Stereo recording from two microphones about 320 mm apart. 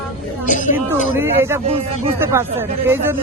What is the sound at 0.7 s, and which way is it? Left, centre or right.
Speech, centre.